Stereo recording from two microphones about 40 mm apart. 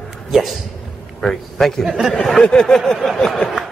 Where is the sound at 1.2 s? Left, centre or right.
Centre.